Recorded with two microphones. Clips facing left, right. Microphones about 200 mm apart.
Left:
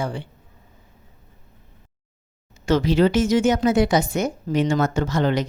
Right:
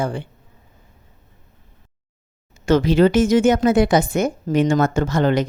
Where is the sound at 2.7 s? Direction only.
55° right (ahead or behind).